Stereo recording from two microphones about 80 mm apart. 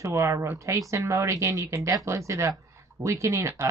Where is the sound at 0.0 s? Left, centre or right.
Right.